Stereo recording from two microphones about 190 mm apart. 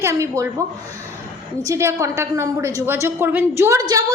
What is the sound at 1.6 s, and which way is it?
A woman's voice, 15° right (ahead or behind).